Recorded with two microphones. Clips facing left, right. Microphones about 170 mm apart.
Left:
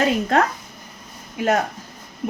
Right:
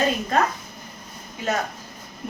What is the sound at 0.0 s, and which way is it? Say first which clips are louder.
Speech: left 3 dB; 75° left (ahead or behind).